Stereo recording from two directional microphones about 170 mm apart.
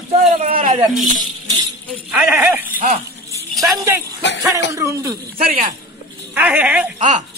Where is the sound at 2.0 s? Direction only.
10° right (ahead or behind).